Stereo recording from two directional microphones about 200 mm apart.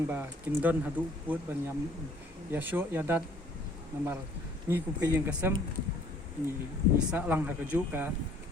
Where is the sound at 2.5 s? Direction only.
10° right (ahead or behind).